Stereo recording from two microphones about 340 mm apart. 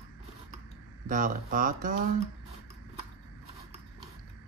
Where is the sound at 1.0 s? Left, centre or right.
Right.